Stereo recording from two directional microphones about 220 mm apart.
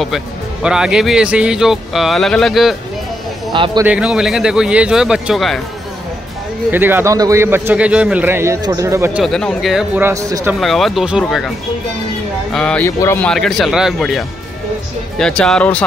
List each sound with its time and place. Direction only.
0.0 s speech: centre (ahead or behind)
3.5 s a man's voice: 20° right (ahead or behind)
3.8 s speech: 5° right (ahead or behind)
6.7 s a man's voice: 10° right (ahead or behind)
9.2 s speech: 5° left (ahead or behind)
10.6 s speech: centre (ahead or behind)
12.5 s speech: 5° left (ahead or behind)